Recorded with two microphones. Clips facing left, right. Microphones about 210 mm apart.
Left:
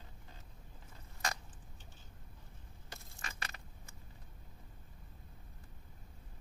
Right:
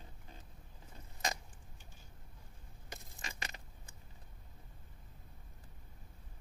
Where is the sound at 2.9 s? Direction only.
15° right (ahead or behind).